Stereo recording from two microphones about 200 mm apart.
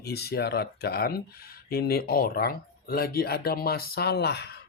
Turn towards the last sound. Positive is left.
turn(degrees=55)  # may be behind; listen again after turning